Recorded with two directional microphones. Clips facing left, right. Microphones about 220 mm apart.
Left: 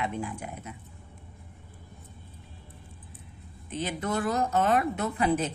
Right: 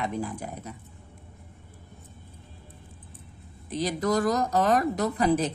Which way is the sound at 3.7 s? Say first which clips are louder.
Right 5 dB; 40° right (ahead or behind).